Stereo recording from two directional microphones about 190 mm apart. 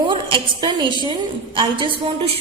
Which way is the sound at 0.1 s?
25° right (ahead or behind).